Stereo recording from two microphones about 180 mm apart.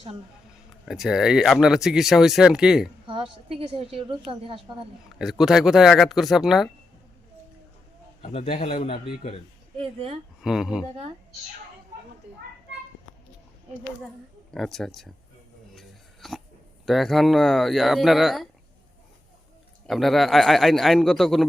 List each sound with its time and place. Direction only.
0.9 s speech: centre (ahead or behind)
3.1 s a woman's voice: 30° right (ahead or behind)
5.2 s speech: centre (ahead or behind)
8.2 s a man's voice: 35° left (ahead or behind)
9.8 s speech: 30° right (ahead or behind)
10.4 s speech: 5° right (ahead or behind)
14.5 s speech: centre (ahead or behind)
15.7 s a sound: centre (ahead or behind)
16.8 s speech: centre (ahead or behind)
19.9 s speech: centre (ahead or behind)